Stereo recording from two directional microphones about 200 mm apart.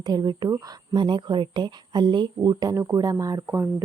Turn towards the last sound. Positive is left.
turn(degrees=-15)  # may be behind; listen again after turning